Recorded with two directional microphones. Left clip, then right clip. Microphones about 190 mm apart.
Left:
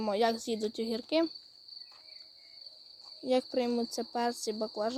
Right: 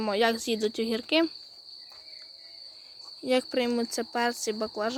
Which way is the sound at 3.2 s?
10° left (ahead or behind).